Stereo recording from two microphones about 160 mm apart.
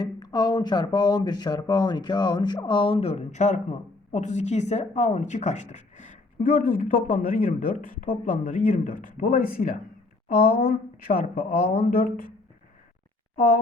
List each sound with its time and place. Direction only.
0.0 s speech: 25° left (ahead or behind); by 12.3 s 65° left (ahead or behind)
13.3 s speech: 60° left (ahead or behind)